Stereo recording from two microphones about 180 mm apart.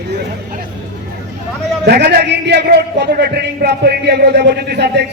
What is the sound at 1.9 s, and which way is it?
A man's voice, 65° right (ahead or behind).